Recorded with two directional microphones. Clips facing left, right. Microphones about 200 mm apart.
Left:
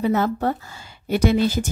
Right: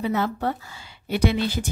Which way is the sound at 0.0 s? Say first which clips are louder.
Left 4 dB; 45° left (ahead or behind).